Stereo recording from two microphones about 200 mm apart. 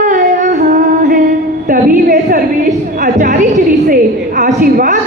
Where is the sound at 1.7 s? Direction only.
45° right (ahead or behind).